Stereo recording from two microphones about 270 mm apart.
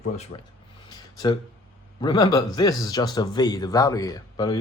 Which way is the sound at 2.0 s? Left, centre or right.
Centre.